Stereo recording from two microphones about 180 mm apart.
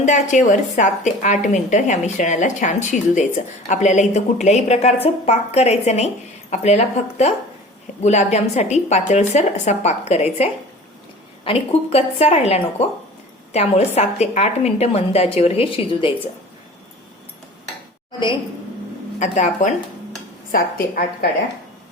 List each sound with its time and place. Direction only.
0.0 s a woman's voice: 40° left (ahead or behind)
11.4 s a woman's voice: 35° left (ahead or behind)
19.2 s a woman's voice: 40° left (ahead or behind)
20.5 s a woman's voice: 55° left (ahead or behind)